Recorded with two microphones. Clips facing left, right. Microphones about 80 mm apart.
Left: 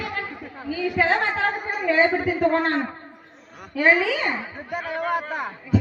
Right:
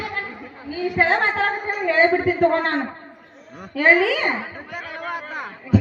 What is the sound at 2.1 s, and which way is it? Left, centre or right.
Speech, right.